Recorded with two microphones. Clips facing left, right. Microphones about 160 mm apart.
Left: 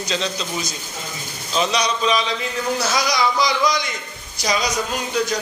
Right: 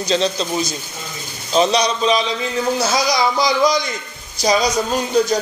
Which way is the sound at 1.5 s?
35° right (ahead or behind).